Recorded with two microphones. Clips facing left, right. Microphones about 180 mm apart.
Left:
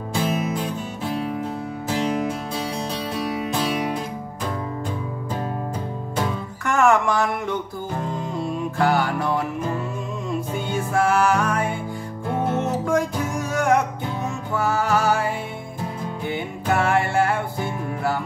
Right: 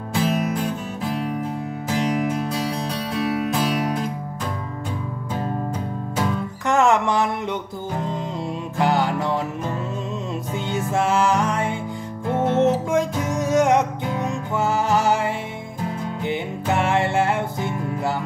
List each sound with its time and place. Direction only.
0.1 s music: centre (ahead or behind)
2.7 s music: centre (ahead or behind)
6.6 s a sound: 20° right (ahead or behind)
8.1 s music: 20° right (ahead or behind)
10.9 s music: 20° right (ahead or behind)